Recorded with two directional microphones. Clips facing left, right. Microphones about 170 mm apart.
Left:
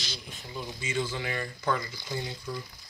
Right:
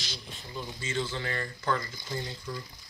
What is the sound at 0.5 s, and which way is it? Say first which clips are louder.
Speech: left 1 dB; 15° left (ahead or behind).